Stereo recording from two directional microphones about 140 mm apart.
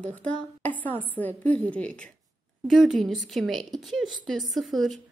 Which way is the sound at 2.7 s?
Centre (ahead or behind).